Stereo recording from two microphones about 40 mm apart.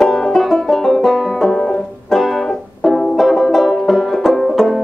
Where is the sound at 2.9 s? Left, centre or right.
Centre.